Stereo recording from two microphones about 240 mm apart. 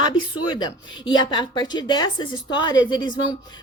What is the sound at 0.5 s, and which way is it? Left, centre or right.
Speech, centre.